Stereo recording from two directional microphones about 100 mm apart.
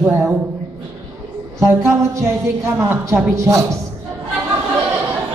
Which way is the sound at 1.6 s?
30° right (ahead or behind).